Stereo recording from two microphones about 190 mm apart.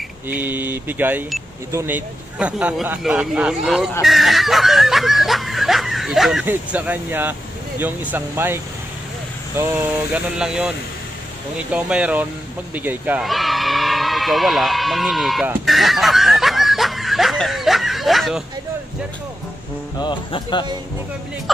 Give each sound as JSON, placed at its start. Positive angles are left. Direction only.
{"t": 0.3, "sound": "speech", "side_deg": -10}
{"t": 4.0, "sound": "snicker", "side_deg": 0}
{"t": 7.8, "sound": "speech", "side_deg": -10}
{"t": 9.6, "sound": "snicker", "side_deg": -10}
{"t": 11.5, "sound": "speech", "side_deg": -5}
{"t": 12.7, "sound": "a sound", "side_deg": -10}
{"t": 20.0, "sound": "speech", "side_deg": 25}